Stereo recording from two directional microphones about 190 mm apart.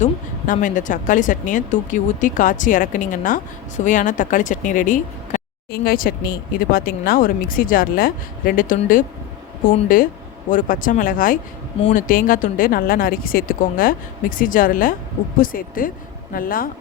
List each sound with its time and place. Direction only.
0.0 s a woman's voice: 45° left (ahead or behind)